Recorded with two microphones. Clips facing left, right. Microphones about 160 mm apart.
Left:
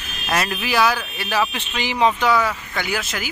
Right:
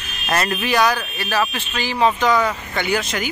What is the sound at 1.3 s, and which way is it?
Speech, 15° left (ahead or behind).